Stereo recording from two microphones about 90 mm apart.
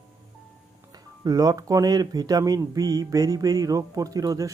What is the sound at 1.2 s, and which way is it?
Speech, 45° right (ahead or behind).